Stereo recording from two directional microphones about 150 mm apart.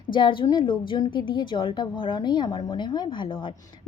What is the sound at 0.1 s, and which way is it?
A woman's voice, 35° left (ahead or behind).